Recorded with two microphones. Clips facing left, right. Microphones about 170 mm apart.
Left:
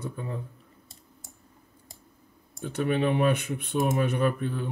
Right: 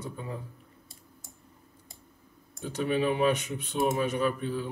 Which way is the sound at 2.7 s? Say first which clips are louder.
Left 2 dB; 60° left (ahead or behind).